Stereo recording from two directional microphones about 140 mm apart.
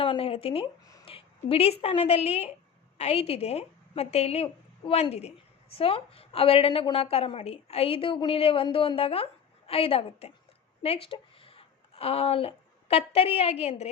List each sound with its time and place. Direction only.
0.0 s a woman's voice: 40° left (ahead or behind)